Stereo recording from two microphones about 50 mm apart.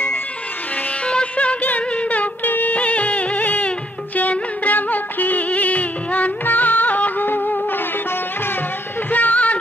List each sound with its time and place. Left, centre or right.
1.0 s music: left
9.1 s music: left